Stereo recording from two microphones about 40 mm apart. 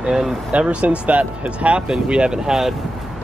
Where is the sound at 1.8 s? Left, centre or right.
Centre.